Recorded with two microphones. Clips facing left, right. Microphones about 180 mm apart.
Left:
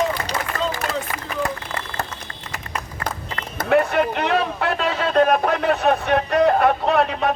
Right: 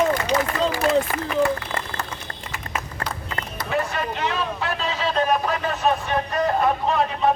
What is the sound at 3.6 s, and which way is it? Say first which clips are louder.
A man's voice: left 8 dB; 60° left (ahead or behind).